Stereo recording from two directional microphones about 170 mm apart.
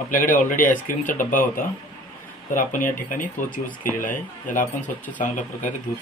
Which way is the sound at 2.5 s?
50° left (ahead or behind).